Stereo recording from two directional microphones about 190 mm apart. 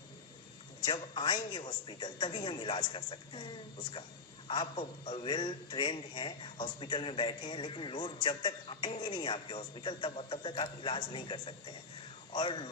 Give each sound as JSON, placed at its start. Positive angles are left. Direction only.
{"t": 0.9, "sound": "a man's voice", "side_deg": 25}